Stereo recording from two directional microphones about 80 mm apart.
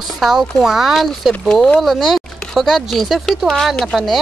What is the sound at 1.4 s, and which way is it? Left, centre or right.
Speech, centre.